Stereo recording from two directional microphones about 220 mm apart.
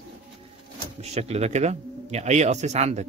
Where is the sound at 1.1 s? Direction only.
30° right (ahead or behind).